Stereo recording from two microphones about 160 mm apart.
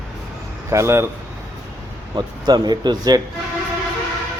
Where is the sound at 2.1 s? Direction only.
25° right (ahead or behind).